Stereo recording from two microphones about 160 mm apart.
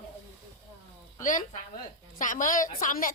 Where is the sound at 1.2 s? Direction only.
55° left (ahead or behind).